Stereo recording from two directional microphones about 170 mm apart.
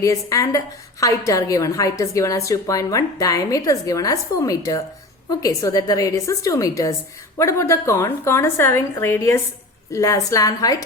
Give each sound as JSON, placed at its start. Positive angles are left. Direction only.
{"t": 0.0, "sound": "a woman's voice", "side_deg": 20}